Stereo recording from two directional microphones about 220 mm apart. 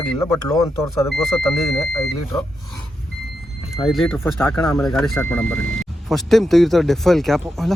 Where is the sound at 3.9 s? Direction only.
Centre (ahead or behind).